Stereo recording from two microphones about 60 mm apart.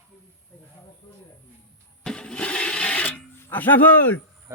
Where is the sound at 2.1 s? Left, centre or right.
Centre.